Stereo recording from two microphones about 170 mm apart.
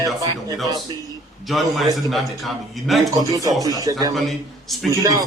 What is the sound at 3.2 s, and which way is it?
Speech, 20° right (ahead or behind).